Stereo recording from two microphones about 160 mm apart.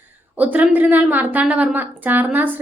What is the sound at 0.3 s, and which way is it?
A woman's voice, 10° right (ahead or behind).